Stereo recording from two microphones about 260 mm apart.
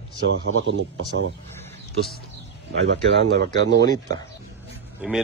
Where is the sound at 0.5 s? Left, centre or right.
Right.